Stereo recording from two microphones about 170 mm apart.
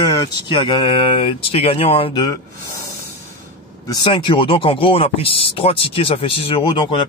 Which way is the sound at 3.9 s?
25° left (ahead or behind).